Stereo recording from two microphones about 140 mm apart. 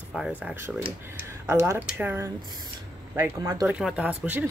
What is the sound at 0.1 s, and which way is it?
Speech, 5° right (ahead or behind).